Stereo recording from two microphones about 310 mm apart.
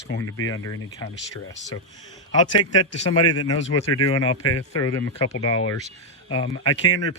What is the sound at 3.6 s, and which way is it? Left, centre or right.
Speech, left.